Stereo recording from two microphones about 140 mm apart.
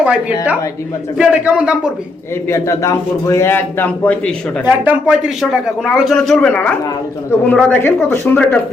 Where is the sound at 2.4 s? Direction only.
20° left (ahead or behind).